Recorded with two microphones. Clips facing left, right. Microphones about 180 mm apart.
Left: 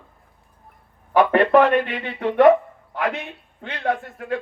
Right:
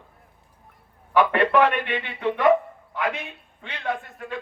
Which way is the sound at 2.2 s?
55° left (ahead or behind).